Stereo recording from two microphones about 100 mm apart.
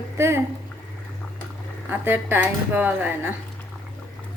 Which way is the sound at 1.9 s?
20° right (ahead or behind).